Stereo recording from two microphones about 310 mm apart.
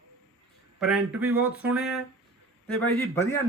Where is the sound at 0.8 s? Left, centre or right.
Centre.